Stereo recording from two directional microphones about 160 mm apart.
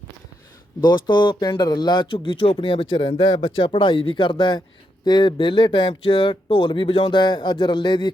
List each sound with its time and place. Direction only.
0.8 s speech: 25° left (ahead or behind)